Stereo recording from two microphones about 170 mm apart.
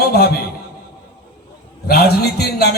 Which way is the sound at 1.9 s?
70° left (ahead or behind).